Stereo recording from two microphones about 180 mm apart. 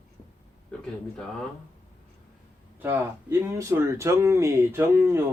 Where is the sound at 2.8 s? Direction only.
10° right (ahead or behind).